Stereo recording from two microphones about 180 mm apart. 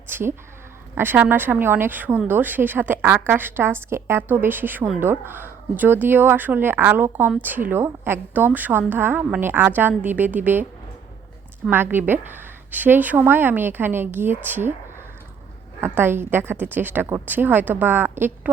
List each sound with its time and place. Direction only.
0.1 s a sound: 10° right (ahead or behind)
0.9 s a woman's voice: 10° right (ahead or behind)
11.7 s a woman's voice: 10° right (ahead or behind)
15.8 s a woman's voice: 10° right (ahead or behind)